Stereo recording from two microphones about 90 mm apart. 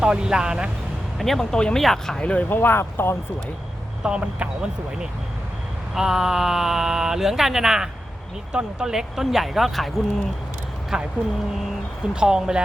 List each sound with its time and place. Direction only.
0.0 s speech: 10° right (ahead or behind)
1.2 s speech: 5° left (ahead or behind); by 3.2 s 25° left (ahead or behind)
4.0 s speech: 10° right (ahead or behind)
5.9 s speech: 5° right (ahead or behind)
10.9 s speech: 5° right (ahead or behind)
12.1 s speech: 10° right (ahead or behind)